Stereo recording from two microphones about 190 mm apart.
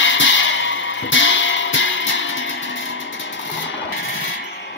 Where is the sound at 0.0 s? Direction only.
80° left.